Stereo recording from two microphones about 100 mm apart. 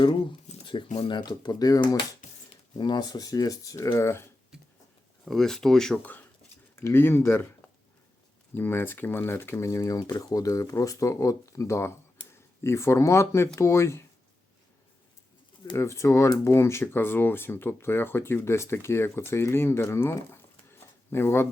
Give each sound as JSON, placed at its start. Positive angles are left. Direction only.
{"t": 0.0, "sound": "speech", "side_deg": 55}
{"t": 5.2, "sound": "speech", "side_deg": 5}
{"t": 6.7, "sound": "speech", "side_deg": 25}
{"t": 8.5, "sound": "speech", "side_deg": 20}
{"t": 10.0, "sound": "speech", "side_deg": 45}
{"t": 10.2, "sound": "speech", "side_deg": 35}
{"t": 15.7, "sound": "speech", "side_deg": 25}